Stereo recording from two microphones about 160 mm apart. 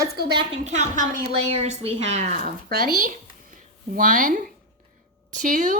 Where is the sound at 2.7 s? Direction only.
65° right (ahead or behind).